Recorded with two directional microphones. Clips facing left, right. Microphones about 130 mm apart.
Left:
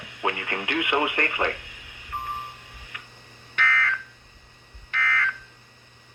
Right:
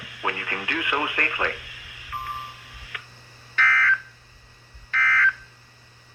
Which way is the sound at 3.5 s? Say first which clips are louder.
Right 3 dB; 20° left (ahead or behind).